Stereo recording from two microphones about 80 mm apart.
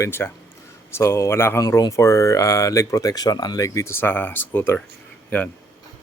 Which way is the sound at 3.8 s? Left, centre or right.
Left.